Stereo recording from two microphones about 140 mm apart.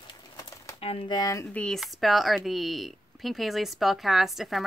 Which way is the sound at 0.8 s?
40° left (ahead or behind).